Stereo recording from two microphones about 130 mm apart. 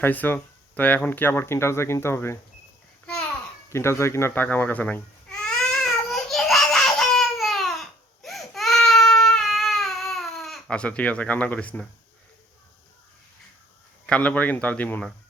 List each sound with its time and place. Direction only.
0.0 s speech: 15° left (ahead or behind)
3.7 s speech: 20° left (ahead or behind)
4.4 s babbling: 10° left (ahead or behind)
14.1 s a man's voice: 10° left (ahead or behind)